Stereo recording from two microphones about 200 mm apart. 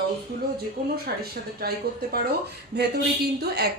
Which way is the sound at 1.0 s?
50° right (ahead or behind).